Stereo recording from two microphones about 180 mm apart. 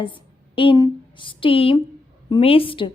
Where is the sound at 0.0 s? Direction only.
30° left (ahead or behind).